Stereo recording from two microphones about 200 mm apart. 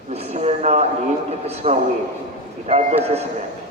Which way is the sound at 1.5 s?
35° right (ahead or behind).